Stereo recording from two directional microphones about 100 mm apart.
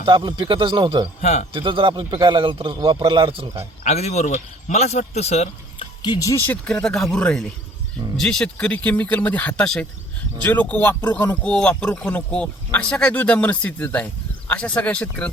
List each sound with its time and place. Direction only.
0.0 s a man's voice: 50° right (ahead or behind)
1.5 s a man's voice: 60° right (ahead or behind)
3.8 s a man's voice: 90° left
6.1 s speech: 35° left (ahead or behind)
6.4 s speech: 15° left (ahead or behind)